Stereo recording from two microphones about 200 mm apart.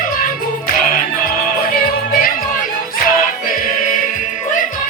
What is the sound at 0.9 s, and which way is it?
Music, 45° left (ahead or behind).